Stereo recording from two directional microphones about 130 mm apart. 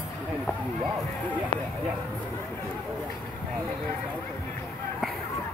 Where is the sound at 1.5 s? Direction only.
45° left (ahead or behind).